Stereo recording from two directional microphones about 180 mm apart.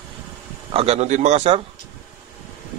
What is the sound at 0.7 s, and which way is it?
Speech, 35° right (ahead or behind).